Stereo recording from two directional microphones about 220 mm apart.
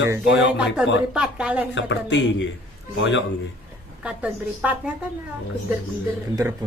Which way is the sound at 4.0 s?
5° right (ahead or behind).